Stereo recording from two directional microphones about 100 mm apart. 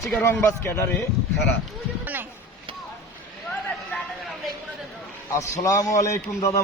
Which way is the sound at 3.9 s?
15° left (ahead or behind).